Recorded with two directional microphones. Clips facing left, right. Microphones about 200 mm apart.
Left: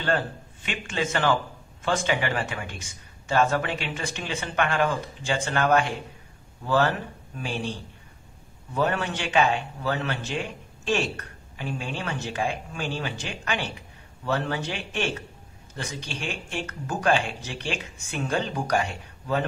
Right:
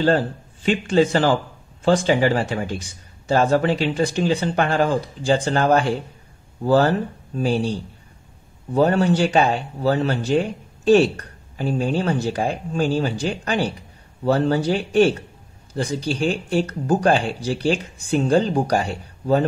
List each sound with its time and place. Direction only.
0.7 s speech: 35° right (ahead or behind)